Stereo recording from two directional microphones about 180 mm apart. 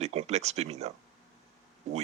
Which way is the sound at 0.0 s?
35° right (ahead or behind).